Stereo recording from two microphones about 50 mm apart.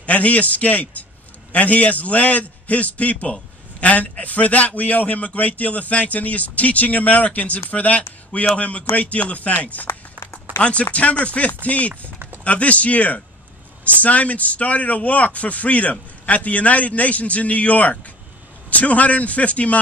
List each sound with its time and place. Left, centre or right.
0.0 s a man's voice: left